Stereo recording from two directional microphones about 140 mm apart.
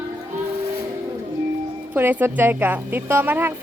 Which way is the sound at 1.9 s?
15° right (ahead or behind).